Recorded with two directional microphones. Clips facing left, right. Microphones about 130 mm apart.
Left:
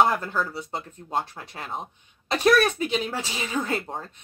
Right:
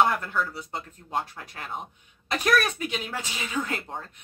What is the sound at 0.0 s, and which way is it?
Speech, 25° left (ahead or behind).